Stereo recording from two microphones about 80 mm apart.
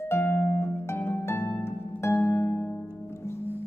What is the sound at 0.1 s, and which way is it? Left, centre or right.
Harp, left.